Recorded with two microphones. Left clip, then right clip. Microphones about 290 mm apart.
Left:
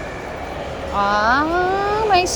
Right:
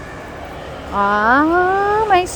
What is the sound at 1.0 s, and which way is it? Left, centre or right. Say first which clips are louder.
Speech: right 3 dB; centre.